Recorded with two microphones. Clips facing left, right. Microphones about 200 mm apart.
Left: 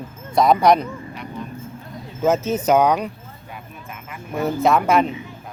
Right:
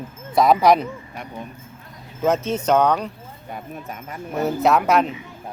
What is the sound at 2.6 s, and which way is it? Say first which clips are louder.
Speech: left 1 dB; 10° left (ahead or behind).